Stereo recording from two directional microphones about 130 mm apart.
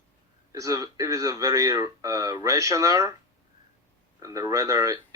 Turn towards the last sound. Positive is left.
turn(degrees=-25)  # may be behind; listen again after turning